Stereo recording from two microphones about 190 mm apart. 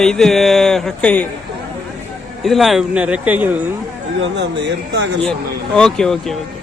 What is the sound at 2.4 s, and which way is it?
Speech, centre (ahead or behind).